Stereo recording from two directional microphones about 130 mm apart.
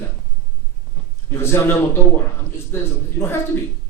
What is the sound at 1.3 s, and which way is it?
Speech, 20° left (ahead or behind).